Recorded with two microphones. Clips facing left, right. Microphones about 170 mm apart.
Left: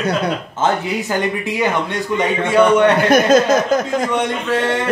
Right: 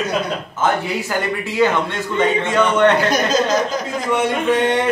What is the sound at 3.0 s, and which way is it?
Speech, 55° left (ahead or behind).